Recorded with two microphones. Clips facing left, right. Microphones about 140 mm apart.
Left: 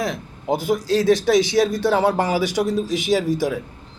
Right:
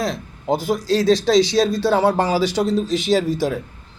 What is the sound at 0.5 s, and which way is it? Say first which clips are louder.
Speech: even; 15° left (ahead or behind).